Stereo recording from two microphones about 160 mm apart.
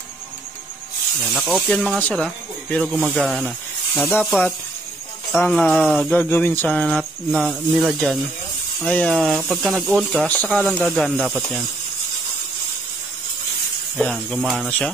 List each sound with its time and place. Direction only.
1.3 s speech: centre (ahead or behind)
4.0 s speech: 10° left (ahead or behind); by 10.2 s 5° right (ahead or behind)
10.2 s speech: 5° left (ahead or behind)
13.9 s speech: centre (ahead or behind)